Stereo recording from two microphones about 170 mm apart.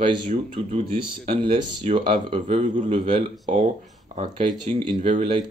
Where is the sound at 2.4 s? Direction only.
45° right (ahead or behind).